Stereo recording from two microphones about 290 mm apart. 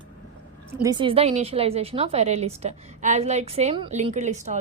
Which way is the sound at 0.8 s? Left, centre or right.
Centre.